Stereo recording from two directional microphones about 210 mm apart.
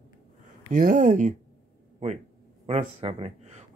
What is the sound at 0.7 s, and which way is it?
Speech, 40° right (ahead or behind).